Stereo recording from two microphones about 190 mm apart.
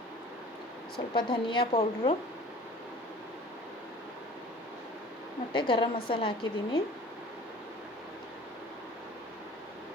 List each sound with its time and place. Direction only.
1.1 s a woman's voice: 25° left (ahead or behind)
1.7 s speech: 35° left (ahead or behind)
5.5 s a woman's voice: 25° left (ahead or behind)